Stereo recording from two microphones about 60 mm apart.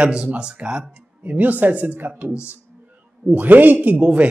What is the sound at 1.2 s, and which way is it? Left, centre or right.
A man's voice, right.